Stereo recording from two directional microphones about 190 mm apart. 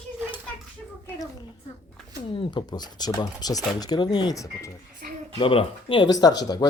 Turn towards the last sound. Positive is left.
turn(degrees=20)  # may be behind; listen again after turning